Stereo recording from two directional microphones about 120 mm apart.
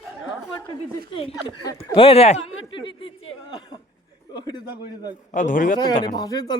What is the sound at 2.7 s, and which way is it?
A man's voice, 45° left (ahead or behind).